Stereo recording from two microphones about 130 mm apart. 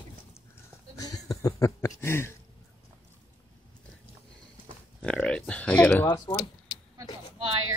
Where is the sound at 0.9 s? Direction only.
25° left (ahead or behind).